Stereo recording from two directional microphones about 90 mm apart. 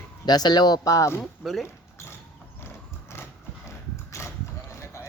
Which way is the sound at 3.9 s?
30° left (ahead or behind).